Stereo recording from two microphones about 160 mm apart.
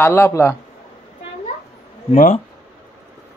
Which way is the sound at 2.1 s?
55° left (ahead or behind).